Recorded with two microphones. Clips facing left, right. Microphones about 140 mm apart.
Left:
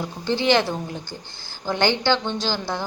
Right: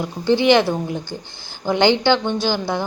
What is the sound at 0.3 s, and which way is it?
A woman's voice, 15° right (ahead or behind).